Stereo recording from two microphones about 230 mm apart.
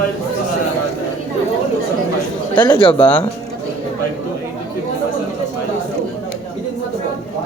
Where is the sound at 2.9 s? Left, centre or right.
Centre.